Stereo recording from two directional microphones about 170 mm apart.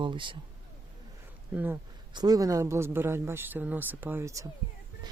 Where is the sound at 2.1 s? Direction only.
20° right (ahead or behind).